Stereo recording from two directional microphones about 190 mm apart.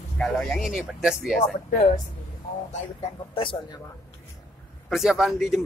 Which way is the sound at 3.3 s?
30° left (ahead or behind).